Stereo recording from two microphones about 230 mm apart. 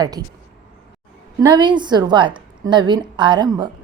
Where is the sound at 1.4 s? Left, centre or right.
Centre.